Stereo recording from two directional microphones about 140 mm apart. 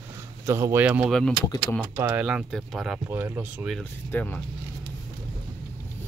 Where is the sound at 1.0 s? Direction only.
5° left (ahead or behind).